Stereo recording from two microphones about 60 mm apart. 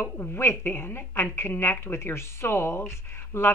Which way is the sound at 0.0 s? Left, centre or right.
Left.